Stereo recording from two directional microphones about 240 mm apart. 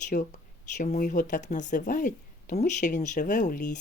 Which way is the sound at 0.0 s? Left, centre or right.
Left.